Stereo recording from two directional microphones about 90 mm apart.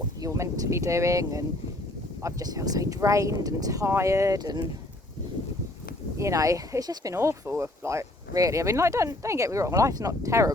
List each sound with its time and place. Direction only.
0.2 s speech: 35° right (ahead or behind)
4.4 s speech: 50° right (ahead or behind)
6.1 s speech: 35° right (ahead or behind)
7.1 s speech: 30° right (ahead or behind)